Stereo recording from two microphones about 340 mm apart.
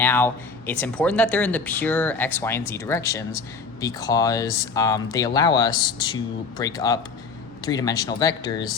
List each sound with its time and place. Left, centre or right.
0.0 s speech: centre